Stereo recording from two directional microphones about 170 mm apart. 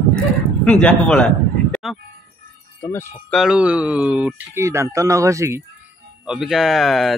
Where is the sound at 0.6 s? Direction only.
5° left (ahead or behind).